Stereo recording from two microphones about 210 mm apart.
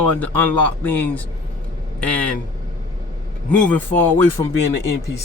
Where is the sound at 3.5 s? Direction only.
5° left (ahead or behind).